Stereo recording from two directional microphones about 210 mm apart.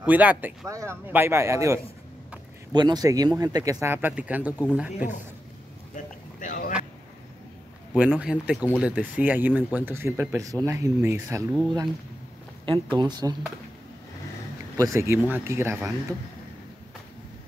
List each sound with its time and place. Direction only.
0.0 s a man's voice: 10° right (ahead or behind)
5.9 s a sound: 40° left (ahead or behind)
7.9 s a man's voice: 5° right (ahead or behind)
12.6 s speech: 20° right (ahead or behind)
14.8 s speech: 15° right (ahead or behind)